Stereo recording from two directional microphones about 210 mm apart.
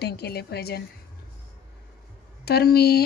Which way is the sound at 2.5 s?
50° left (ahead or behind).